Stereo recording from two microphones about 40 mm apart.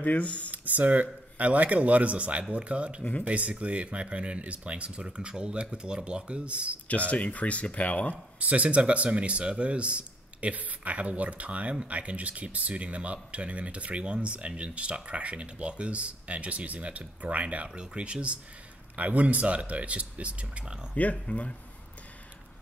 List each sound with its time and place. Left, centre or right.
0.0 s speech: left
0.5 s speech: right
3.0 s speech: left
3.3 s speech: right
7.1 s speech: left
8.4 s speech: right
17.6 s speech: right
20.9 s speech: left